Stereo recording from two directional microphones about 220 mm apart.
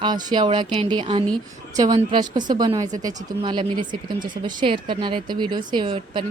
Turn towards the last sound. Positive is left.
turn(degrees=-20)  # may be behind; listen again after turning